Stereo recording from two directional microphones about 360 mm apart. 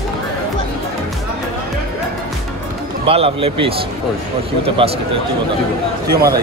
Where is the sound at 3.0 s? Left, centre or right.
Centre.